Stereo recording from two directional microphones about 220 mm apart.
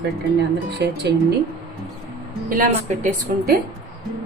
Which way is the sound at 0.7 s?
50° right (ahead or behind).